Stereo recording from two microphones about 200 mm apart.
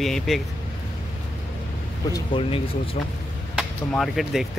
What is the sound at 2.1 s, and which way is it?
Speech, 20° left (ahead or behind).